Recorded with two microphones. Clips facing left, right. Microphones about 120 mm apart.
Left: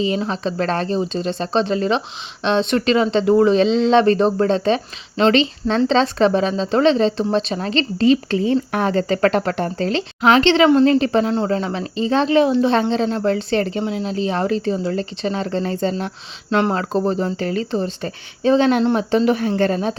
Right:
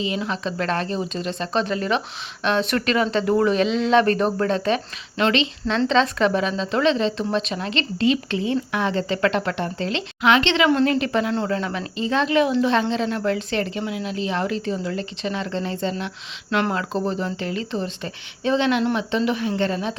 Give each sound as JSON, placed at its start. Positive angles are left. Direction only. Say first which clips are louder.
{"t": 0.0, "sound": "speech", "louder": "left 5 dB", "side_deg": 35}